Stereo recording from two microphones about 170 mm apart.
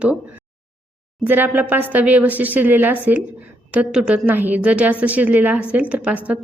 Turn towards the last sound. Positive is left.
turn(degrees=-10)  # may be behind; listen again after turning